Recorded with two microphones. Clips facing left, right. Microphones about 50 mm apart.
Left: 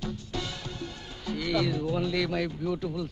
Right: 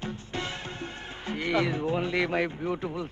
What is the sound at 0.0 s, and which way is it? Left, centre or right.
Music, right.